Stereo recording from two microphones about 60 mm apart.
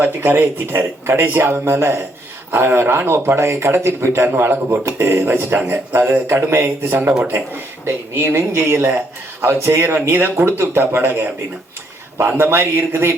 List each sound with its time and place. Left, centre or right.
0.0 s a man's voice: right
4.3 s a man's voice: right
12.4 s speech: right